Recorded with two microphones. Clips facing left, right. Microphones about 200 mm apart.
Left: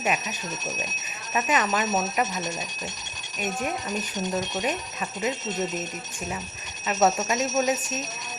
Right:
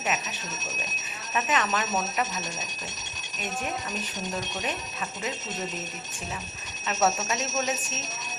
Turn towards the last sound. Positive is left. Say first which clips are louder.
# left 5 dB
turn(degrees=15)  # may be behind; listen again after turning